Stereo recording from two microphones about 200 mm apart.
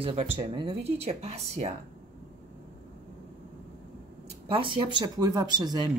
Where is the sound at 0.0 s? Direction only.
30° right (ahead or behind).